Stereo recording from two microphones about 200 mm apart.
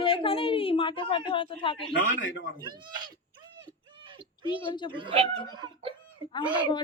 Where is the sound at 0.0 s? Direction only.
25° left (ahead or behind).